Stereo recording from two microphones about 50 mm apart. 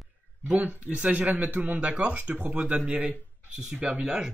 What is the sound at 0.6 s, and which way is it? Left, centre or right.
Speech, right.